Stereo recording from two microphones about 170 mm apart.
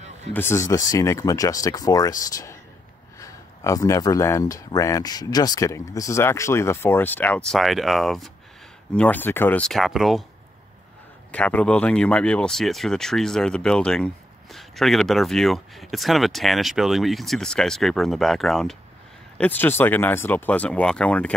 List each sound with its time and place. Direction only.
0.3 s speech: 15° left (ahead or behind)
11.3 s speech: 5° left (ahead or behind)